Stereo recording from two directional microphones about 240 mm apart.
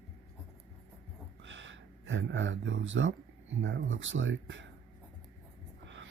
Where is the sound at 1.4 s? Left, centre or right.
Right.